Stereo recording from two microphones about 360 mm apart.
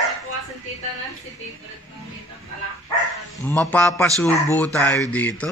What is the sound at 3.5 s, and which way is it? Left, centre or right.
A man's voice, centre.